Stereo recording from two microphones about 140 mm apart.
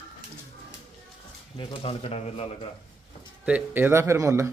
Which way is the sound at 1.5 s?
40° left (ahead or behind).